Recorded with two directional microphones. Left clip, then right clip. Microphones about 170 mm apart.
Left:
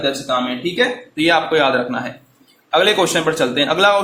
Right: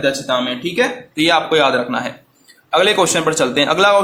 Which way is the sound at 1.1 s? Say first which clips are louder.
Right 2 dB; 15° right (ahead or behind).